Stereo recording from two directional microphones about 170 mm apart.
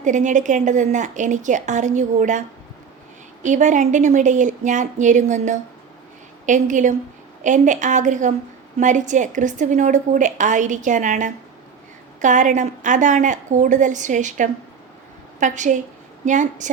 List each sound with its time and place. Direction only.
0.0 s a woman's voice: 45° right (ahead or behind)
3.4 s a woman's voice: 45° right (ahead or behind)